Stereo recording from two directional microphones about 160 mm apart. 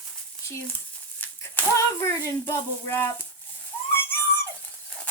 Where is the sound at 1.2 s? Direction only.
15° left (ahead or behind).